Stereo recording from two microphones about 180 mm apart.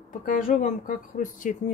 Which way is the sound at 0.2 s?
50° left (ahead or behind).